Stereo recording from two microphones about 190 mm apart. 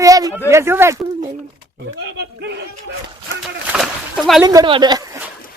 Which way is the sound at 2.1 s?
65° right (ahead or behind).